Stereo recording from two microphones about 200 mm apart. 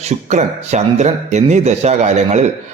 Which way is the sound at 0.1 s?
35° right (ahead or behind).